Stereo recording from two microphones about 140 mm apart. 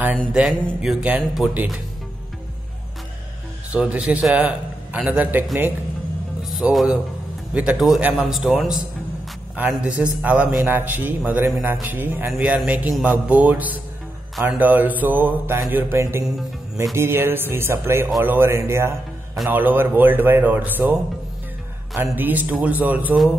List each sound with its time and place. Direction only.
0.3 s speech: 5° right (ahead or behind)
3.7 s a man's voice: 10° right (ahead or behind)
6.5 s a man's voice: centre (ahead or behind)
22.0 s a man's voice: 15° right (ahead or behind)